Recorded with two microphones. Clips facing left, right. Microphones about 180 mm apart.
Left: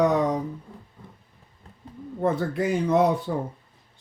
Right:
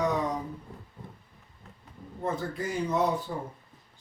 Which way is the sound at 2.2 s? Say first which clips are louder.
Left 8 dB; 65° left (ahead or behind).